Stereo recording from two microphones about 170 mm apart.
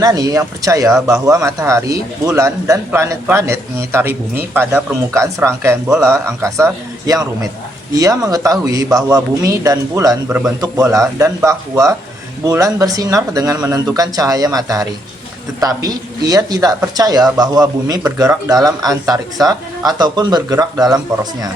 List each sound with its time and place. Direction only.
0.0 s a man's voice: 20° right (ahead or behind)
7.9 s speech: 20° right (ahead or behind)